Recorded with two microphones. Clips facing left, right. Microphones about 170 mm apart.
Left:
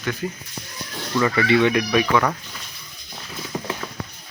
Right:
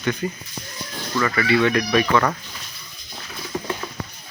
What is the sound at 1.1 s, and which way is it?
Speech, 20° left (ahead or behind).